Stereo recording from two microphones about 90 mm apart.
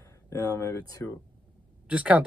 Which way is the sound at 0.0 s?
35° left (ahead or behind).